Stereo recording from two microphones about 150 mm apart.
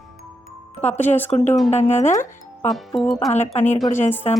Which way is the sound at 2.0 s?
15° left (ahead or behind).